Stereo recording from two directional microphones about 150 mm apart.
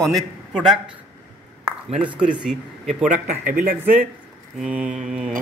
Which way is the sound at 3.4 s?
65° right (ahead or behind).